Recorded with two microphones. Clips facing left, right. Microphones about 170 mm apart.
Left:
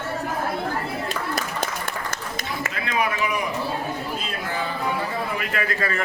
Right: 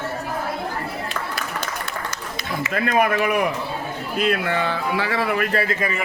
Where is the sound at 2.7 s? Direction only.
50° right (ahead or behind).